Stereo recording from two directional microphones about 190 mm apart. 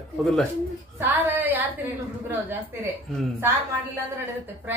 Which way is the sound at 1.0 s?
10° right (ahead or behind).